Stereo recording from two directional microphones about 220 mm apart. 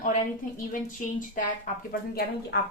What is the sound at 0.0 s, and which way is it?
A woman's voice, 35° left (ahead or behind).